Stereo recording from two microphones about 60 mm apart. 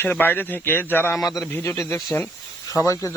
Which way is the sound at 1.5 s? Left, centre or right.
Left.